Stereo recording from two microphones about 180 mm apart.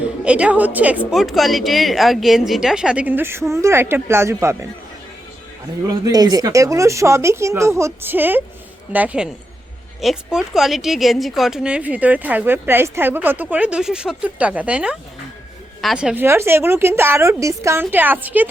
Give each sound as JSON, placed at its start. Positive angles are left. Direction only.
{"t": 0.3, "sound": "a woman's voice", "side_deg": -5}
{"t": 5.9, "sound": "a woman's voice", "side_deg": -20}